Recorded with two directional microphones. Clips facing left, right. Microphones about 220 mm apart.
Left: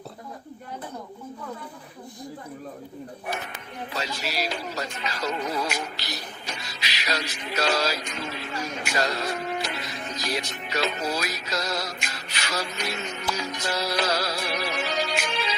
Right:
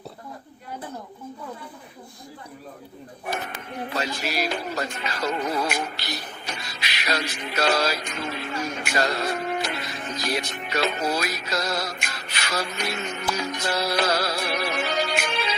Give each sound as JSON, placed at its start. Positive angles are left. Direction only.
{"t": 3.8, "sound": "music", "side_deg": -55}